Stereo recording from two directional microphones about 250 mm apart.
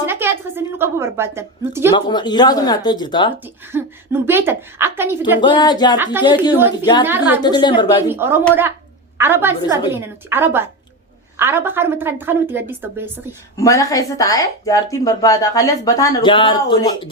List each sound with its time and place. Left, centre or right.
0.0 s a woman's voice: centre
2.0 s speech: centre
3.4 s a woman's voice: centre
5.4 s speech: centre
7.1 s a woman's voice: centre
7.4 s speech: centre
8.1 s a woman's voice: centre
13.6 s speech: centre